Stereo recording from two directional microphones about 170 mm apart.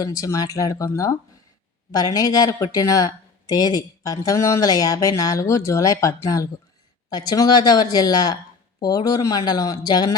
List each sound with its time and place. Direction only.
0.0 s speech: 20° left (ahead or behind)